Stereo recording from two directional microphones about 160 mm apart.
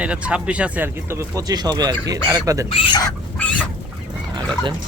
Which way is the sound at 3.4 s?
5° left (ahead or behind).